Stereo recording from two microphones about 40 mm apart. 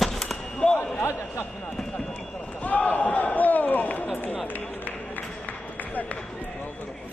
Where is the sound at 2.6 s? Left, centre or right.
Left.